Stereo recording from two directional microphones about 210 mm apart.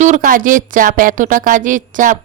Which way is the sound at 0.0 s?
35° right (ahead or behind).